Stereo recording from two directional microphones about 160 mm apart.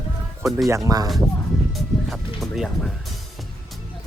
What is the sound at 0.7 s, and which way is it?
Speech, 20° right (ahead or behind).